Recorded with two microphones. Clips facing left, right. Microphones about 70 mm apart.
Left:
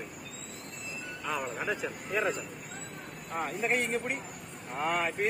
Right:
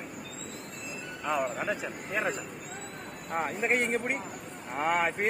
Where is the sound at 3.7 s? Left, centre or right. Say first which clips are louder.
Right 4 dB; right.